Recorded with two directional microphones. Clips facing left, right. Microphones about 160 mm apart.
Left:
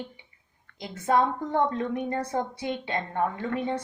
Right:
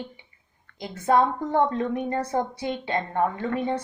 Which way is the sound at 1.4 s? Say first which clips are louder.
Right 3 dB; 25° right (ahead or behind).